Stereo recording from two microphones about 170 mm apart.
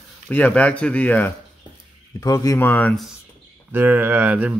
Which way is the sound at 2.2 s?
20° left (ahead or behind).